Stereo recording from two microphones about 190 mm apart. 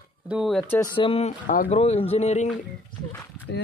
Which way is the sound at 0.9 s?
30° left (ahead or behind).